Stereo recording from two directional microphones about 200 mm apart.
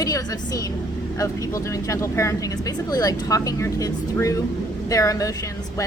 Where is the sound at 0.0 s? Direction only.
20° left (ahead or behind).